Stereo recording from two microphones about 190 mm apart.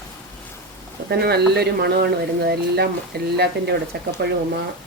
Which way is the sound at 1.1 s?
55° right (ahead or behind).